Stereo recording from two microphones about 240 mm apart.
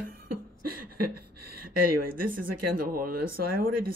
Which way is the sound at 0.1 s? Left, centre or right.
Right.